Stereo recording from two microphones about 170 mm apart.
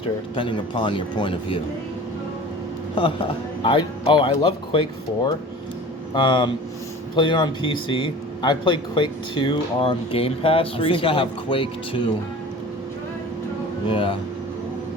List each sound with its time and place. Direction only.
0.3 s speech: 30° left (ahead or behind)
2.9 s speech: 30° left (ahead or behind)
13.8 s speech: 30° left (ahead or behind)